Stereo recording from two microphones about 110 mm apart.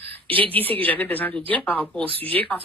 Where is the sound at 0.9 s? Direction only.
15° left (ahead or behind).